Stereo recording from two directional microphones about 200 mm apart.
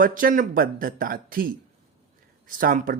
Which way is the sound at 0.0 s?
45° right (ahead or behind).